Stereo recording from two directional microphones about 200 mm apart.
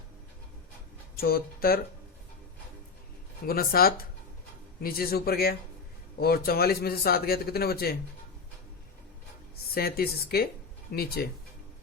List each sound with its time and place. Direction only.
1.1 s speech: 50° left (ahead or behind)
3.4 s a man's voice: 45° left (ahead or behind)
9.7 s a man's voice: 50° left (ahead or behind)